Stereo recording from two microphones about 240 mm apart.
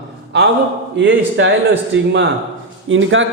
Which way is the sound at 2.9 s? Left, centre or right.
Right.